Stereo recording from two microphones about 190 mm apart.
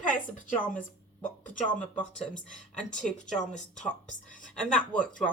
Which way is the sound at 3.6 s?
40° left (ahead or behind).